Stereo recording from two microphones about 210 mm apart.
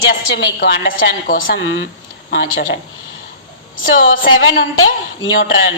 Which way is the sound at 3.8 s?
70° left (ahead or behind).